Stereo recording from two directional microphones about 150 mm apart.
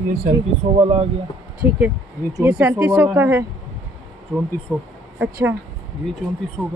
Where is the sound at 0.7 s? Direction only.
45° right (ahead or behind).